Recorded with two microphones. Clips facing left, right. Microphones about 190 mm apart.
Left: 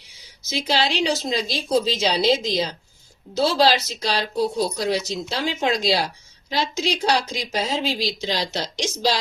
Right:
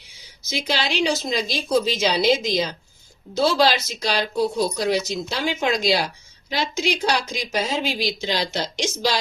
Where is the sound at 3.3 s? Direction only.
30° left (ahead or behind).